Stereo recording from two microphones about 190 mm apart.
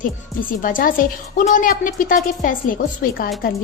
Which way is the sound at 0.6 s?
45° left (ahead or behind).